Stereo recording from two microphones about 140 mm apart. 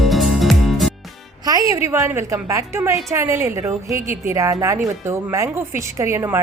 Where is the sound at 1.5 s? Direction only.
25° right (ahead or behind).